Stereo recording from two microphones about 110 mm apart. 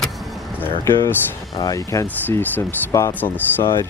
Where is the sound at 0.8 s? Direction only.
25° left (ahead or behind).